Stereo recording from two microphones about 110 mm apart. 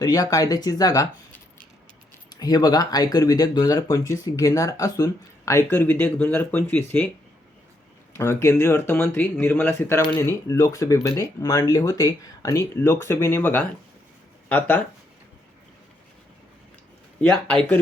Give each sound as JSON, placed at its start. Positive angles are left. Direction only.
{"t": 0.0, "sound": "speech", "side_deg": 30}
{"t": 2.3, "sound": "speech", "side_deg": 35}
{"t": 8.1, "sound": "speech", "side_deg": 25}
{"t": 17.2, "sound": "speech", "side_deg": 5}